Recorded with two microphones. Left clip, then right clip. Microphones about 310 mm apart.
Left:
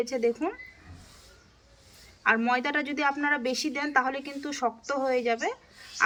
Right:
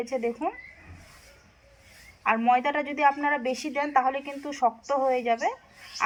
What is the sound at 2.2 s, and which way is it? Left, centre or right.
A woman's voice, centre.